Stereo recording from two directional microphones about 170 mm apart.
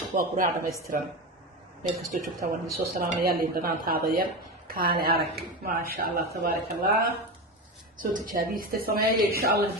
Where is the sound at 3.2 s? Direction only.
60° right (ahead or behind).